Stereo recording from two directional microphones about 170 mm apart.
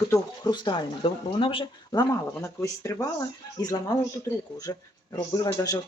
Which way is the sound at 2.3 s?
15° left (ahead or behind).